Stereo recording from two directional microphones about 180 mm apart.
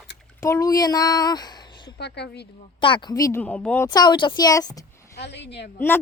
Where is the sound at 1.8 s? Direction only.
65° left (ahead or behind).